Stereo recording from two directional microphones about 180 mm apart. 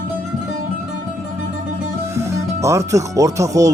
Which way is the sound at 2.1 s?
15° right (ahead or behind).